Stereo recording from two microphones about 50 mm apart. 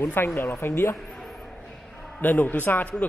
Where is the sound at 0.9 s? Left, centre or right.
Centre.